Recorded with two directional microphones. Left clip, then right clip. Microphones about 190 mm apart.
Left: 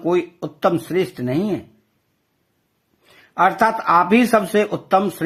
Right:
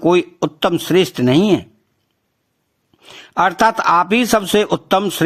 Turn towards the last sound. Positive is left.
turn(degrees=-35)  # may be behind; listen again after turning